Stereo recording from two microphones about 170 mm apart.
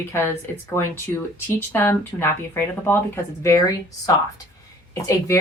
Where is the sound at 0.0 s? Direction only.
15° left (ahead or behind).